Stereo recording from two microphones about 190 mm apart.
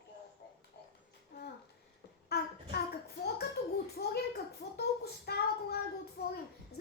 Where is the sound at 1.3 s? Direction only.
55° left (ahead or behind).